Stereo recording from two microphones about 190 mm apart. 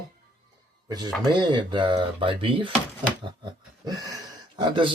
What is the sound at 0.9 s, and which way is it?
Speech, 20° right (ahead or behind).